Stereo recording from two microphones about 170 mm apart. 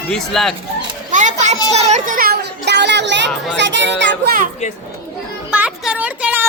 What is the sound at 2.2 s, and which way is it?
A child's voice, 75° right (ahead or behind).